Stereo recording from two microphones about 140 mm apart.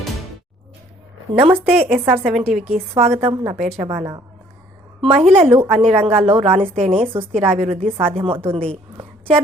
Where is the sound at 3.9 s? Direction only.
25° right (ahead or behind).